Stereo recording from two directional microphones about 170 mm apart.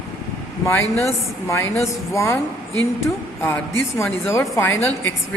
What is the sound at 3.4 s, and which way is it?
A woman's voice, 15° left (ahead or behind).